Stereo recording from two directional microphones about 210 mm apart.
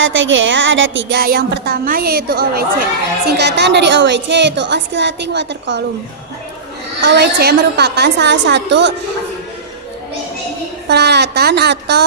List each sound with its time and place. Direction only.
0.0 s a woman's voice: 65° right (ahead or behind)
7.0 s speech: 50° right (ahead or behind)
10.8 s speech: 50° right (ahead or behind)